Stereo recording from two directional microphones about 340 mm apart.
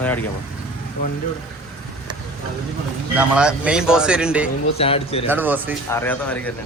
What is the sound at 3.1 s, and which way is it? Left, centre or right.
Speech, centre.